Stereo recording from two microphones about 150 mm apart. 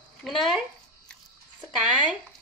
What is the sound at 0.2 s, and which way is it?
Speech, centre (ahead or behind).